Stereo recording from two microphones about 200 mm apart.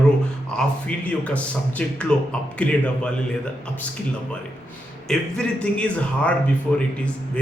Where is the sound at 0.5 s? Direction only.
5° left (ahead or behind).